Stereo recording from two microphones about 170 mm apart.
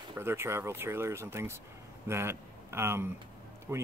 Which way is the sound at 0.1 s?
15° right (ahead or behind).